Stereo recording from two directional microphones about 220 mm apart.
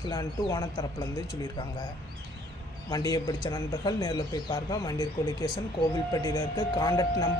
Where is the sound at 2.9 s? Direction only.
15° left (ahead or behind).